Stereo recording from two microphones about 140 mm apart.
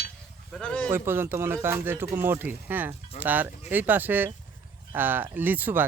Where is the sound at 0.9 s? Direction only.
15° right (ahead or behind).